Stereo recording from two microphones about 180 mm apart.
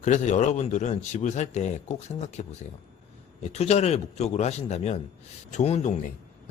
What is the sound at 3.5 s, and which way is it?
Speech, 35° left (ahead or behind).